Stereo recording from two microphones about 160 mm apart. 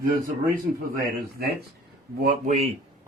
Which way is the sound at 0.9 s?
70° right (ahead or behind).